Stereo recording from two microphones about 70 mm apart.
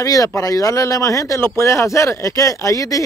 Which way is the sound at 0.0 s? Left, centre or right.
Left.